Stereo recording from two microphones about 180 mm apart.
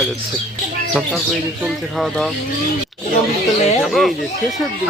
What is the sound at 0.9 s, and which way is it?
Speech, centre (ahead or behind).